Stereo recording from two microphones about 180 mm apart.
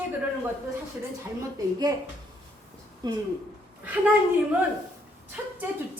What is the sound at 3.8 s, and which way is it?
Speech, 10° right (ahead or behind).